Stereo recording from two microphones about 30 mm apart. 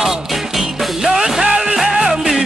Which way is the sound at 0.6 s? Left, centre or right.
Centre.